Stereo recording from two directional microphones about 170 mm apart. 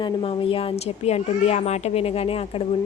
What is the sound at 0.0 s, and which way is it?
A woman's voice, 35° left (ahead or behind).